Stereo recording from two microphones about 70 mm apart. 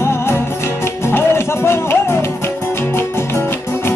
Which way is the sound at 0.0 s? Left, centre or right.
Left.